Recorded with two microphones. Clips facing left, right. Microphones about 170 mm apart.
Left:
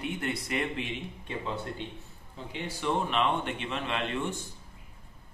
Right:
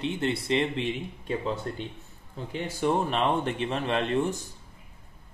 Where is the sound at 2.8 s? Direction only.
40° right (ahead or behind).